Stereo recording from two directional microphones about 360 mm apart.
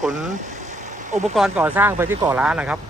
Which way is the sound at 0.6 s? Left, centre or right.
Centre.